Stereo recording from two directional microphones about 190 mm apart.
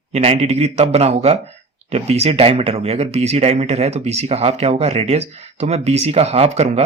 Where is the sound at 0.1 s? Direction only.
35° right (ahead or behind).